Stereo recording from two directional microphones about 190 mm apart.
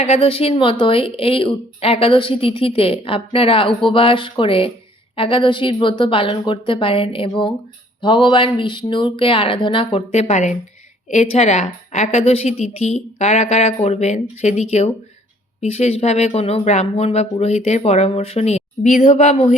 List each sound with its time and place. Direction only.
0.0 s a woman's voice: 30° left (ahead or behind)